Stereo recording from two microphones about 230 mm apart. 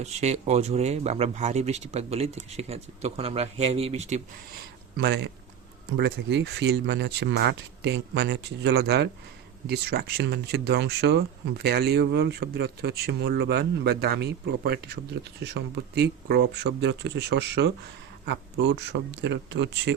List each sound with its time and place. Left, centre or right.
0.0 s speech: right
4.9 s speech: right